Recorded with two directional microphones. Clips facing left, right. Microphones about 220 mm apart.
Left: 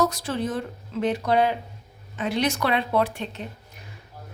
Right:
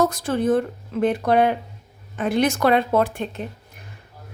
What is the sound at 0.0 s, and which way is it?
Speech, 50° right (ahead or behind).